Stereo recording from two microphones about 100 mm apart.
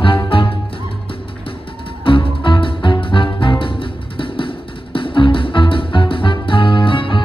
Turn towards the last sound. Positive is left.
turn(degrees=60)  # may be behind; listen again after turning